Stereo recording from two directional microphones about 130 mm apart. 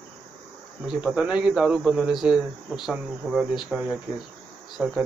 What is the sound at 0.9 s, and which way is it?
A man's voice, 5° right (ahead or behind).